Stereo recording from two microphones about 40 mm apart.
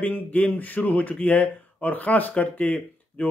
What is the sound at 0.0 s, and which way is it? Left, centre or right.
A man's voice, left.